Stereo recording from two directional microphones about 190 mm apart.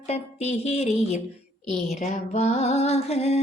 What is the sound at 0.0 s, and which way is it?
Speech, 35° left (ahead or behind).